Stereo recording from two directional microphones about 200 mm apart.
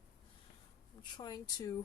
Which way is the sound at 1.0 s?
20° left (ahead or behind).